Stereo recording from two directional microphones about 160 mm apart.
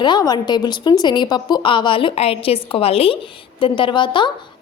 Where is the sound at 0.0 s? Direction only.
25° left (ahead or behind).